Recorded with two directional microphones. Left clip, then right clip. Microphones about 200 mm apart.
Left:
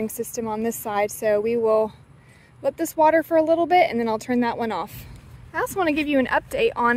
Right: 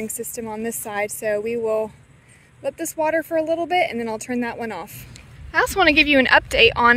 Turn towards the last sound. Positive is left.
turn(degrees=5)  # may be behind; listen again after turning